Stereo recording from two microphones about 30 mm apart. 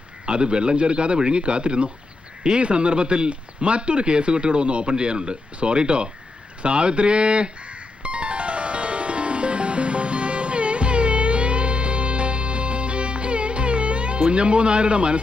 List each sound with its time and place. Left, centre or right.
0.3 s speech: right
6.6 s music: right